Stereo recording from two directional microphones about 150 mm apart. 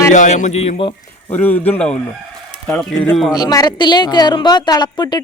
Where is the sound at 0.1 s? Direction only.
55° left (ahead or behind).